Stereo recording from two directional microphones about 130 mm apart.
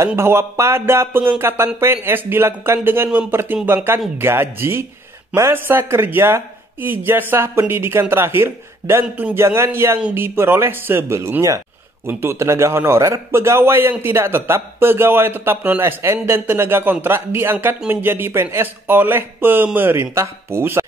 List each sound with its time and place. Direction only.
0.0 s a man's voice: 20° right (ahead or behind)